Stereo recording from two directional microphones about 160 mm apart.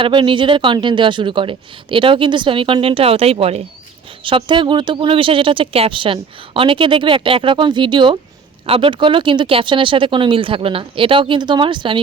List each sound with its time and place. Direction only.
0.0 s speech: 30° right (ahead or behind)